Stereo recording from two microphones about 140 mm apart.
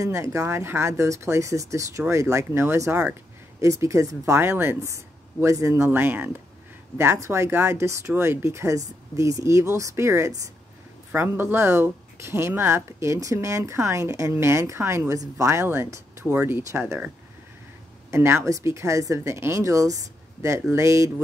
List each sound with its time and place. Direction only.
0.0 s speech: 20° right (ahead or behind)
18.1 s speech: 20° right (ahead or behind)